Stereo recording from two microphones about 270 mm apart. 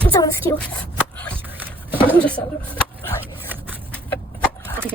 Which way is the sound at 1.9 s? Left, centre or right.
Centre.